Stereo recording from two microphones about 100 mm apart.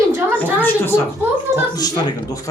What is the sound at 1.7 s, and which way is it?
Speech, 40° left (ahead or behind).